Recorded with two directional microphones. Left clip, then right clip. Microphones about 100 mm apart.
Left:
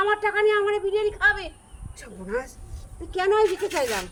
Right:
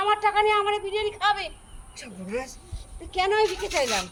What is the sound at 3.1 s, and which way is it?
Speech, 55° left (ahead or behind).